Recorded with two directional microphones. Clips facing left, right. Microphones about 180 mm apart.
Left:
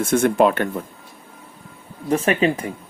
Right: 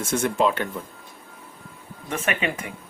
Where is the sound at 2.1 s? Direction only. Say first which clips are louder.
Left 8 dB; 35° left (ahead or behind).